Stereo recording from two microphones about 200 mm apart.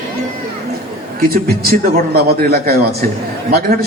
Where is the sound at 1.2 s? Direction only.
50° right (ahead or behind).